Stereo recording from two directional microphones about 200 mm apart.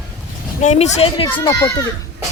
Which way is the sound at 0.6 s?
35° left (ahead or behind).